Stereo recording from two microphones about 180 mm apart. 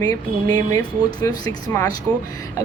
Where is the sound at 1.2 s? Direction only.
20° left (ahead or behind).